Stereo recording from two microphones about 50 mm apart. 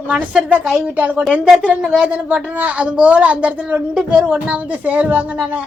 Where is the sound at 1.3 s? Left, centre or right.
Right.